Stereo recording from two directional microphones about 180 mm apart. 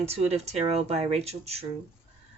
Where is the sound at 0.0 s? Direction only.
35° right (ahead or behind).